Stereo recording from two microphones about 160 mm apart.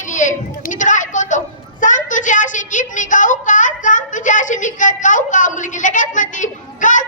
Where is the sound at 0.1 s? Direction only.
50° left (ahead or behind).